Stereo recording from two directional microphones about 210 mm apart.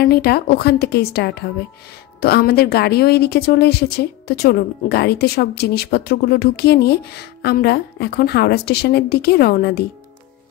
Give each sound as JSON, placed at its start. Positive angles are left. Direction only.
{"t": 0.0, "sound": "a woman's voice", "side_deg": 50}